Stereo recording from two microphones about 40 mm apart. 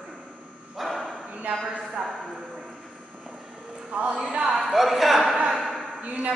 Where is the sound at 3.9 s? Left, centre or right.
Right.